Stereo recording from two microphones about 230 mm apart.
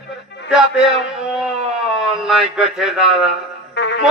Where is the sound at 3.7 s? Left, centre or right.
Left.